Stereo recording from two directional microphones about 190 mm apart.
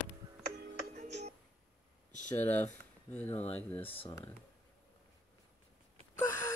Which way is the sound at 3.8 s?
30° left (ahead or behind).